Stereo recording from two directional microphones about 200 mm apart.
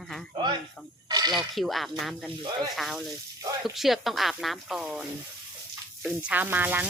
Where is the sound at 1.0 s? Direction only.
20° right (ahead or behind).